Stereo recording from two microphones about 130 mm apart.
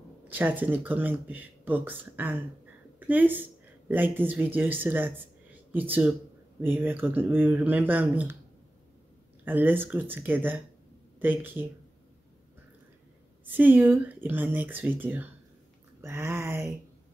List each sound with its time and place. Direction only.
0.3 s a woman's voice: 15° right (ahead or behind)
9.4 s speech: 15° right (ahead or behind)
13.5 s speech: 15° right (ahead or behind)